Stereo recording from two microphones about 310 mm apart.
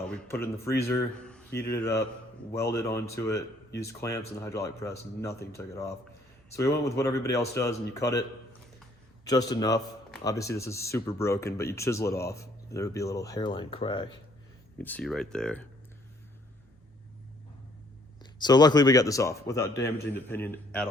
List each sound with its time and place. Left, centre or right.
0.1 s speech: centre
9.2 s speech: centre
14.8 s speech: centre
18.2 s speech: centre